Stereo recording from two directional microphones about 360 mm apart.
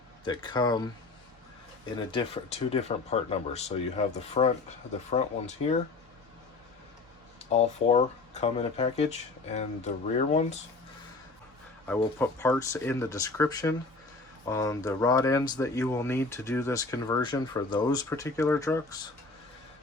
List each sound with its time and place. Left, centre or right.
0.3 s speech: centre
2.0 s speech: centre
7.5 s speech: centre
11.9 s speech: centre